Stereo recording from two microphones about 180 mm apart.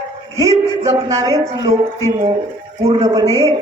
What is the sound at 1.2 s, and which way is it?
Speech, 20° right (ahead or behind).